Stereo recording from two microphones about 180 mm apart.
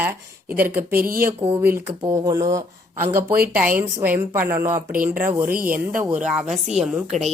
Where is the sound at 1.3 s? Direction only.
10° right (ahead or behind).